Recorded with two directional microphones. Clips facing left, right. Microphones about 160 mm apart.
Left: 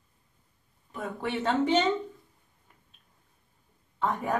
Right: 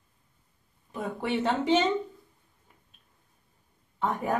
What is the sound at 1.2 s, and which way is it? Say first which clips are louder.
Speech: even; 15° right (ahead or behind).